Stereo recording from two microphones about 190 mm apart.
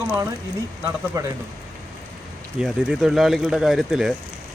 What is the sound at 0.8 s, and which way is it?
Speech, 15° right (ahead or behind).